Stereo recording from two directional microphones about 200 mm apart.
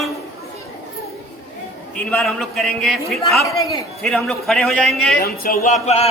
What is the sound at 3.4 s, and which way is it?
Speech, 15° left (ahead or behind).